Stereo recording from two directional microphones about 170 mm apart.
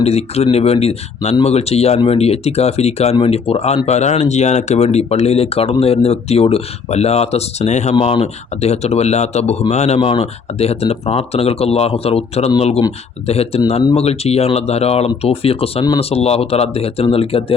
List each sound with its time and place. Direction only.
0.0 s speech: 40° left (ahead or behind)